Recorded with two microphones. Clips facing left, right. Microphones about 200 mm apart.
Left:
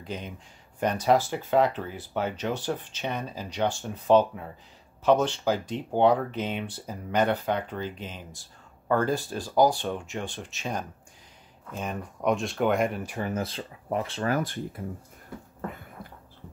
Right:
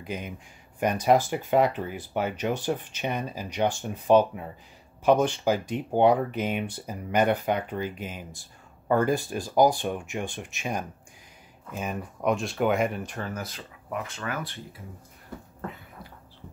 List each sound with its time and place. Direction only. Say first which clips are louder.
0.0 s speech: right 1 dB; 10° right (ahead or behind)
13.2 s speech: left 4 dB; 25° left (ahead or behind); by 14.8 s 45° left (ahead or behind)
15.7 s a sound: left 2 dB; 50° left (ahead or behind)